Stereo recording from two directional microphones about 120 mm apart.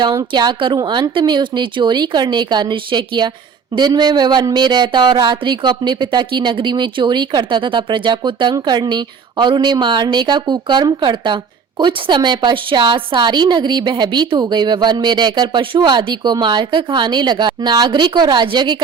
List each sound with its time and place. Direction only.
0.0 s a woman's voice: 35° right (ahead or behind)